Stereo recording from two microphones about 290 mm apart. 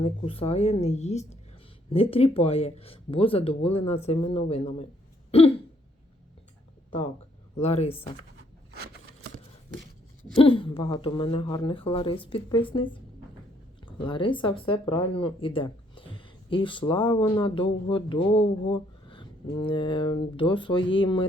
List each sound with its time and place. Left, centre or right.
0.0 s speech: centre
7.6 s speech: left
10.3 s speech: centre